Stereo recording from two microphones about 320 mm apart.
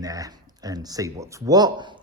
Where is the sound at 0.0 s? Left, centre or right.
Centre.